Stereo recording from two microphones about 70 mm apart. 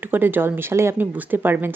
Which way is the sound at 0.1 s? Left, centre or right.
Right.